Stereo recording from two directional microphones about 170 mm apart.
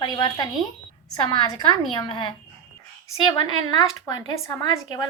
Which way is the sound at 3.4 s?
25° left (ahead or behind).